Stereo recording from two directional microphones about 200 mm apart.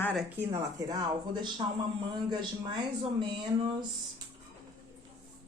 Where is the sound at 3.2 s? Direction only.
25° right (ahead or behind).